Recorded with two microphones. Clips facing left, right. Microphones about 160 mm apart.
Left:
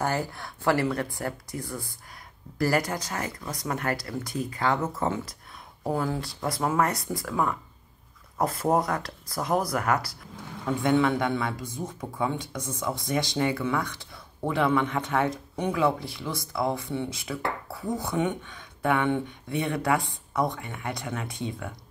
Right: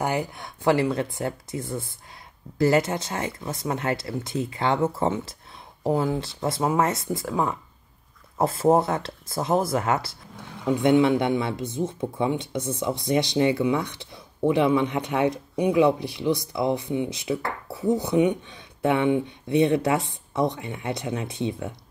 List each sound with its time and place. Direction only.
0.0 s speech: 20° right (ahead or behind)